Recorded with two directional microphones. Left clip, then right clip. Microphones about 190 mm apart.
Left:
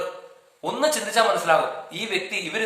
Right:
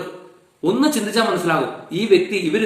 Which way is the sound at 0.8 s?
15° left (ahead or behind).